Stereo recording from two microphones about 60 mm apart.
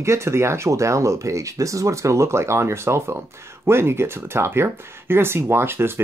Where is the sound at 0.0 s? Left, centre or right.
Right.